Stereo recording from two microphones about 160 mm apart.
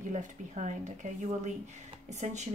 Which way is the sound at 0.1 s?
50° right (ahead or behind).